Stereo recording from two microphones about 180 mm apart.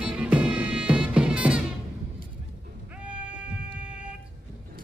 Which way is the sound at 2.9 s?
5° right (ahead or behind).